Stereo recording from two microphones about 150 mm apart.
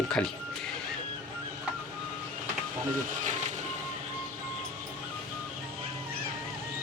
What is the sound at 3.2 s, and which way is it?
Vehicle, 55° right (ahead or behind).